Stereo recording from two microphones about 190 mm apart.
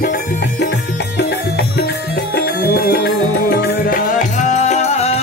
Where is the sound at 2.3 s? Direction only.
55° left (ahead or behind).